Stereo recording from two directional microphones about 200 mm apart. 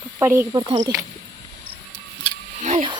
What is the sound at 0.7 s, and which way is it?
Speech, 25° right (ahead or behind).